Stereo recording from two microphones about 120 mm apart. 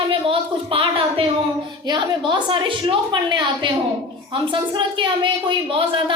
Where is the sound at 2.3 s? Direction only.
40° right (ahead or behind).